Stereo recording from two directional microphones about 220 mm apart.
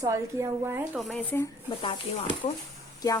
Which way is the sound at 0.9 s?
5° left (ahead or behind).